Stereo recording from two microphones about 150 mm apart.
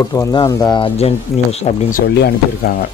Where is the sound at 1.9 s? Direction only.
75° left (ahead or behind).